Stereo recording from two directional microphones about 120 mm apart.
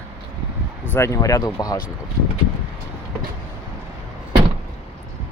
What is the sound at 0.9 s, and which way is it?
Speech, 25° left (ahead or behind).